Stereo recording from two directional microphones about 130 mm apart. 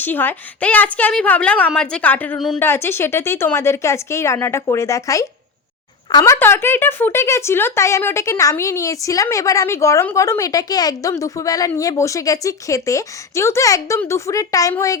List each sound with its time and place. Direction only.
0.0 s a woman's voice: 15° left (ahead or behind)